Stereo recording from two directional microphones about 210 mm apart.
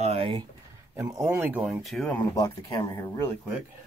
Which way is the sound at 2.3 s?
20° left (ahead or behind).